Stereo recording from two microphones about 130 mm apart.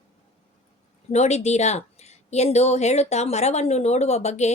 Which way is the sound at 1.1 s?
60° left (ahead or behind).